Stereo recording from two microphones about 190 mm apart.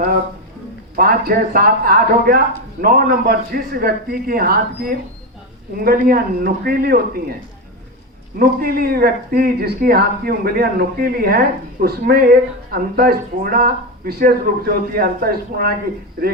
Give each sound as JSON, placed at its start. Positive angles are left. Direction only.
{"t": 0.9, "sound": "speech", "side_deg": -50}
{"t": 8.4, "sound": "speech", "side_deg": -50}